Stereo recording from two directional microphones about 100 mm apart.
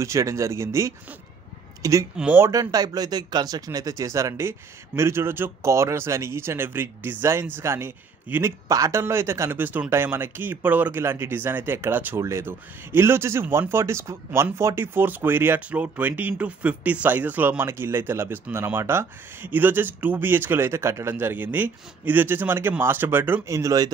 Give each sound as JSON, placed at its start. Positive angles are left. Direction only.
{"t": 0.0, "sound": "speech", "side_deg": -30}